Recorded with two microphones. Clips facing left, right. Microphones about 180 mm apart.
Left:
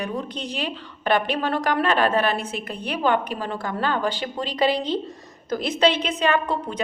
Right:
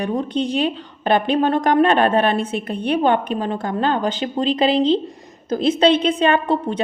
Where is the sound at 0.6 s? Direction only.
25° right (ahead or behind).